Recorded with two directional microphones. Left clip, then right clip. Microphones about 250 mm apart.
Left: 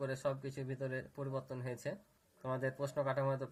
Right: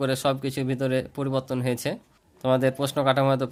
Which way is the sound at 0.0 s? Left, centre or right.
Right.